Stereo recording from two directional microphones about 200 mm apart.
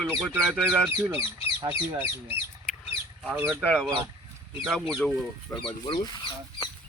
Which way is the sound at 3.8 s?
20° right (ahead or behind).